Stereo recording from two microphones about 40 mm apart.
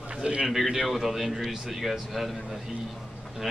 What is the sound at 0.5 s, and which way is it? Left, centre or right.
A man's voice, centre.